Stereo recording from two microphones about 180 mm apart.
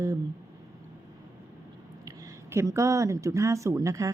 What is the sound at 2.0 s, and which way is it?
Speech, 15° right (ahead or behind).